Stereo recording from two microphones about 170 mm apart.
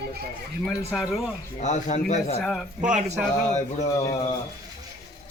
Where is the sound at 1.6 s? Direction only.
45° left (ahead or behind).